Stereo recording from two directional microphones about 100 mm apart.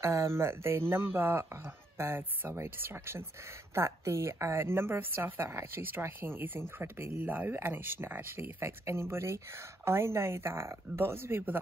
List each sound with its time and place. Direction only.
0.0 s speech: 30° right (ahead or behind)